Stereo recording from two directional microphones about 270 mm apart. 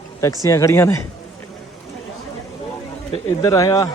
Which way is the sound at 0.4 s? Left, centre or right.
Centre.